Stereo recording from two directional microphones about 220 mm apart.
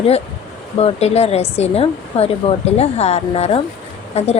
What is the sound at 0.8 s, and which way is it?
A woman's voice, 30° left (ahead or behind).